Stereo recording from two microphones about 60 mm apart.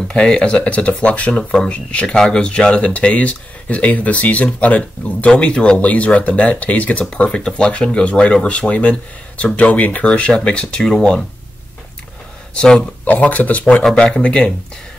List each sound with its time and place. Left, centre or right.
0.1 s speech: centre
1.3 s speech: centre
12.5 s speech: centre
13.0 s speech: left